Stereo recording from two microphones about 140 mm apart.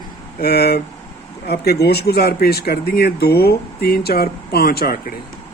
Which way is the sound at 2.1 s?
90° left.